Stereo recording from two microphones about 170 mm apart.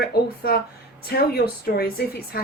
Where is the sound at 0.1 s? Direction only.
60° left (ahead or behind).